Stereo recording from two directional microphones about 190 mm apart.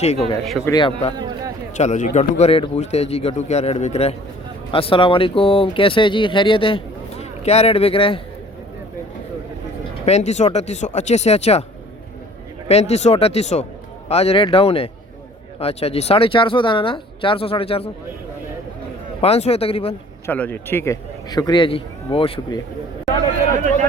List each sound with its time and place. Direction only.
0.0 s a man's voice: 35° left (ahead or behind)
0.6 s speech: 20° left (ahead or behind)
1.7 s a man's voice: 40° left (ahead or behind)
10.1 s a man's voice: 35° left (ahead or behind)
12.6 s a man's voice: 35° left (ahead or behind)
19.2 s a man's voice: 30° left (ahead or behind)
20.2 s speech: 10° left (ahead or behind); by 22.6 s 25° left (ahead or behind)